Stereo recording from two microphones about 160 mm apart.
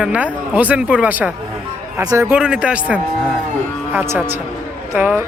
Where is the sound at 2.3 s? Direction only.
5° right (ahead or behind).